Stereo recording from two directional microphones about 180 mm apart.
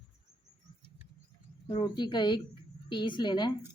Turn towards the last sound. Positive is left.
turn(degrees=25)  # may be behind; listen again after turning